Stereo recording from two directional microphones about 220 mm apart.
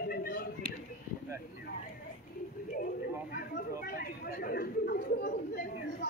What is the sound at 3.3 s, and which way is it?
Chatter, 45° left (ahead or behind).